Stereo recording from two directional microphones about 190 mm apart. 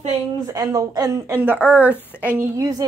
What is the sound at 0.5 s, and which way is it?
A woman's voice, 15° right (ahead or behind).